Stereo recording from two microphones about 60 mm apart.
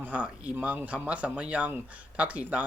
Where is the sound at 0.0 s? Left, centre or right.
Right.